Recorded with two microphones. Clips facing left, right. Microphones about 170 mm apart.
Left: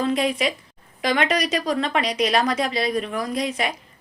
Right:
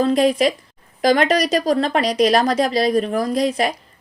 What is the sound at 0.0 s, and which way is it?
Speech, 40° right (ahead or behind).